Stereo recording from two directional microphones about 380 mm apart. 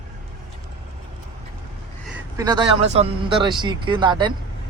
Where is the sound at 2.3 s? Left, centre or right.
Centre.